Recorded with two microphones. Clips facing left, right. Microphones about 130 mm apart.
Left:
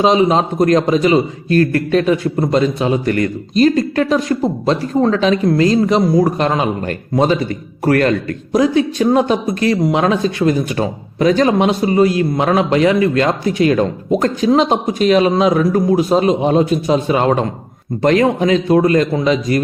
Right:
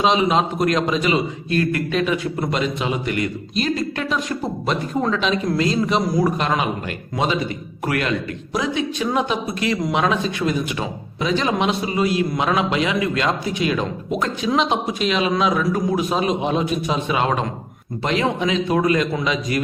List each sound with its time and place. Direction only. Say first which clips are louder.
0.0 s a man's voice: left 5 dB; 35° left (ahead or behind)